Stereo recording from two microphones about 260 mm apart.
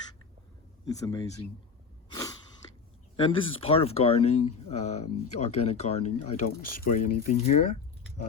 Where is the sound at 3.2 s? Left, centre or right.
Left.